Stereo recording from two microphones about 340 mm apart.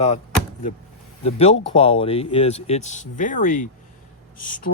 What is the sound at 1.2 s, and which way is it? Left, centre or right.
Speech, centre.